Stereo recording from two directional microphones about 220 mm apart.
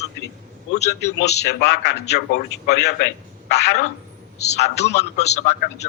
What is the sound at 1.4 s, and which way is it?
A woman's voice, 50° left (ahead or behind).